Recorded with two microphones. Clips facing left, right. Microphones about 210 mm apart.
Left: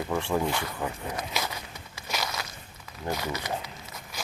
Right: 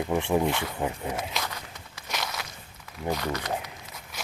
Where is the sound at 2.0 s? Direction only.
Centre (ahead or behind).